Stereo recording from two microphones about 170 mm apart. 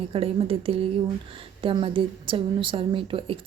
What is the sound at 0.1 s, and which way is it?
Speech, 35° right (ahead or behind).